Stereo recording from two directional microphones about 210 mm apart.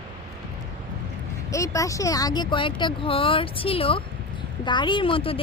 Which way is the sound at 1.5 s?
15° left (ahead or behind).